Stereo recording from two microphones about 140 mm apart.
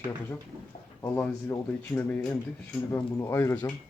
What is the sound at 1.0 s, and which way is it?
Speech, 15° left (ahead or behind).